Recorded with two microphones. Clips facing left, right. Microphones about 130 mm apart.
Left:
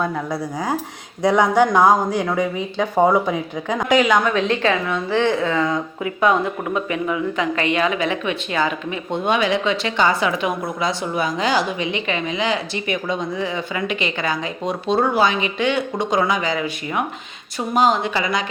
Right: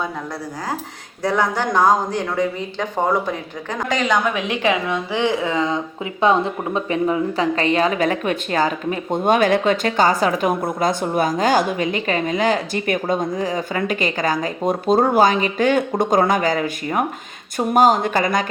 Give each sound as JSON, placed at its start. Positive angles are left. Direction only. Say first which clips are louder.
{"t": 1.2, "sound": "speech", "louder": "left 5 dB", "side_deg": 15}
{"t": 4.3, "sound": "speech", "louder": "left 1 dB", "side_deg": -10}